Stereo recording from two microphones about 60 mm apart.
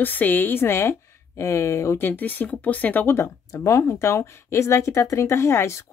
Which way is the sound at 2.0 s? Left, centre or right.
Left.